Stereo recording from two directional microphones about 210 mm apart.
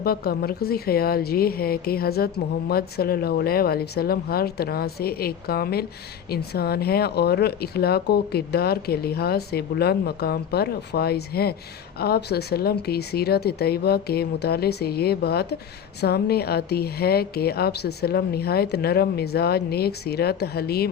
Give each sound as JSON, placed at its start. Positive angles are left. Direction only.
{"t": 0.0, "sound": "a woman's voice", "side_deg": 45}